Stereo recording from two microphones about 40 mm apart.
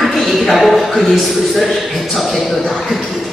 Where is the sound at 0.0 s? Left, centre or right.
Centre.